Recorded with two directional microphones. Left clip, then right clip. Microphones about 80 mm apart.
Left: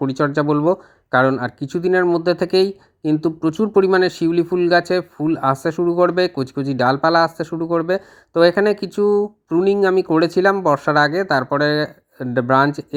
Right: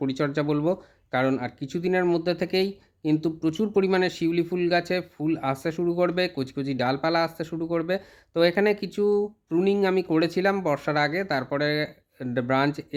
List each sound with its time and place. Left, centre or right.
0.0 s speech: left